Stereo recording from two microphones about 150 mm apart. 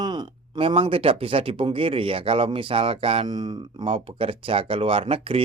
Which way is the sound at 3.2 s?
30° right (ahead or behind).